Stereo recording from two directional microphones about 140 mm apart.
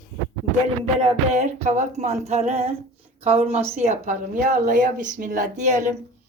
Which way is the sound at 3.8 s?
60° right (ahead or behind).